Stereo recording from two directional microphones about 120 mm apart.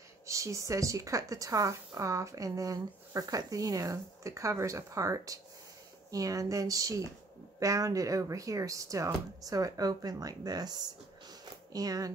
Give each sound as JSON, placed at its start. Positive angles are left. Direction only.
{"t": 0.3, "sound": "speech", "side_deg": -25}